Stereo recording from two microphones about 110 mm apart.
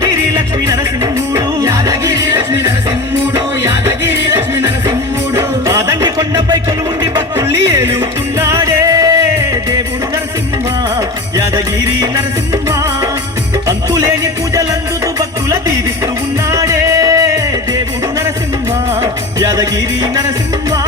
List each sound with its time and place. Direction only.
0.0 s music: 30° right (ahead or behind)
7.3 s music: 25° right (ahead or behind)
11.3 s music: 30° right (ahead or behind)
14.5 s music: 30° right (ahead or behind)
18.9 s music: 30° right (ahead or behind)